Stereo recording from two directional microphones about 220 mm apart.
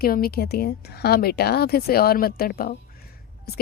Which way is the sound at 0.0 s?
45° left (ahead or behind).